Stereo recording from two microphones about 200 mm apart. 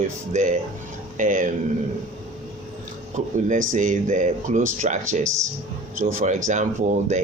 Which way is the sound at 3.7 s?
40° right (ahead or behind).